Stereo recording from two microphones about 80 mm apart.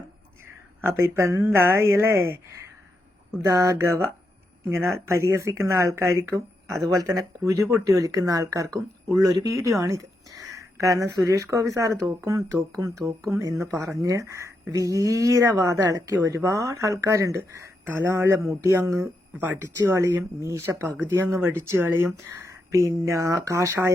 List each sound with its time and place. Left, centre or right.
0.4 s speech: right
3.4 s speech: right
6.8 s speech: right
19.4 s speech: right
19.7 s speech: right
22.1 s speech: right